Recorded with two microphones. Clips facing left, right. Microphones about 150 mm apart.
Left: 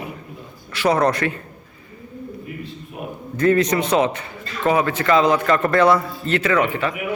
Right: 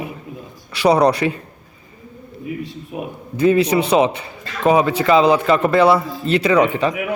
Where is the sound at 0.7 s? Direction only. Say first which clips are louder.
Right 4 dB; 15° right (ahead or behind).